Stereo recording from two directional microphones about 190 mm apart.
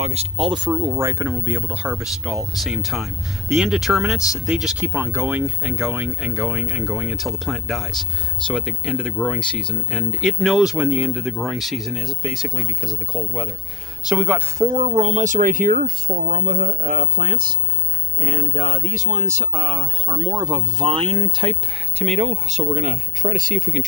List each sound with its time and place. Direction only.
0.0 s speech: 35° right (ahead or behind); by 14.7 s 5° right (ahead or behind)
14.7 s speech: 30° right (ahead or behind)